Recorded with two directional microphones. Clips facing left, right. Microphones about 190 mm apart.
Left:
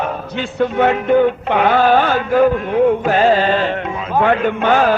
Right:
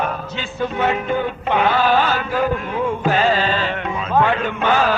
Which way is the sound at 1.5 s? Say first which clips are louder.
Left 2 dB; 55° left (ahead or behind).